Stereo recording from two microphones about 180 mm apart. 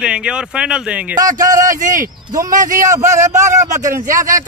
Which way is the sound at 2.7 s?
15° right (ahead or behind).